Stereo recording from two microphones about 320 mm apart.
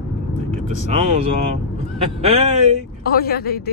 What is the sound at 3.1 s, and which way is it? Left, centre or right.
Speech, left.